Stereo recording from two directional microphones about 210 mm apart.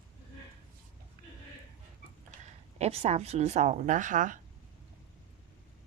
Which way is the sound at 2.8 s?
30° right (ahead or behind).